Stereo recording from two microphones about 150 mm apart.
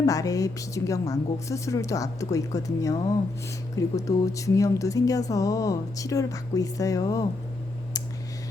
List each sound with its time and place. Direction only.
0.0 s speech: 25° left (ahead or behind)